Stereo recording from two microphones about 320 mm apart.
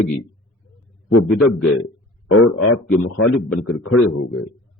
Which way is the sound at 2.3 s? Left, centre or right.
Left.